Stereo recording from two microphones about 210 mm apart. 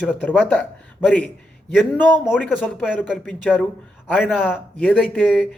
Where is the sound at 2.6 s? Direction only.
Centre (ahead or behind).